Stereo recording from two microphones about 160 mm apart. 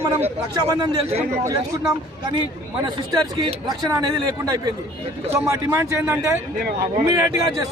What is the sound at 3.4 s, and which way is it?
A man's voice, 25° right (ahead or behind).